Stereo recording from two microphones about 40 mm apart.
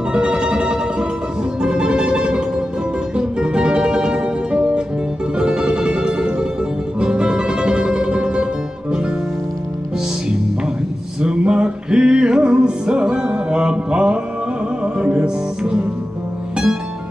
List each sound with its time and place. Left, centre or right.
0.1 s music: right
11.1 s music: right
15.2 s music: centre